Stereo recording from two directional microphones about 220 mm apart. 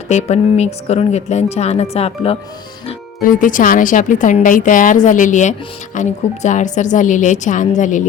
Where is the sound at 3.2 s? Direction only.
35° left (ahead or behind).